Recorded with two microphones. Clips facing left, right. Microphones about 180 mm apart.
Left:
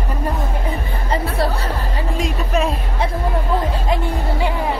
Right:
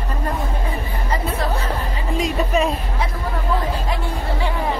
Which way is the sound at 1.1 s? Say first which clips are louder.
Left 3 dB; 35° left (ahead or behind).